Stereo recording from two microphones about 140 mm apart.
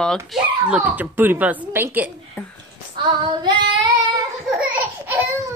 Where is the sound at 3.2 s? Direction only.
30° right (ahead or behind).